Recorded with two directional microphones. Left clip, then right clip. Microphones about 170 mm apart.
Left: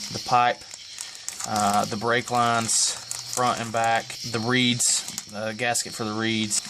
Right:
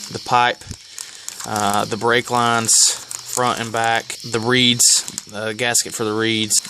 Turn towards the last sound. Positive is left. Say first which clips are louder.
# right 7 dB
turn(degrees=-50)  # may be behind; listen again after turning